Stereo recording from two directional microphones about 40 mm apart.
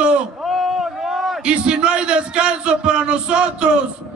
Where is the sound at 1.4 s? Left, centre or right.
Right.